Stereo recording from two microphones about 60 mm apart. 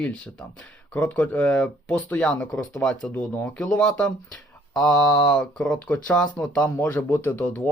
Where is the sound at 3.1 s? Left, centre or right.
Left.